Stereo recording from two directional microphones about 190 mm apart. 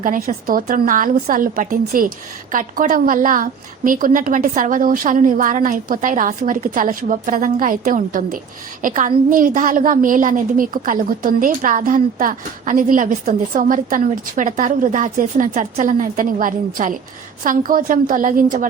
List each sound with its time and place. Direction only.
0.0 s a woman's voice: 45° right (ahead or behind)